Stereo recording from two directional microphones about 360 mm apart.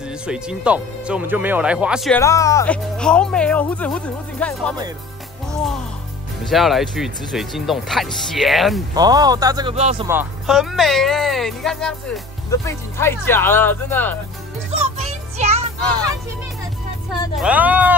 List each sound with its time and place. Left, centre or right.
0.3 s speech: centre
5.5 s music: centre
6.5 s speech: centre
8.9 s a man's voice: centre
10.0 s speech: centre
14.7 s music: centre
17.4 s speech: centre